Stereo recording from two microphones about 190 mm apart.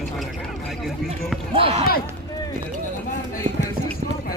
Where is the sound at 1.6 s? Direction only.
30° right (ahead or behind).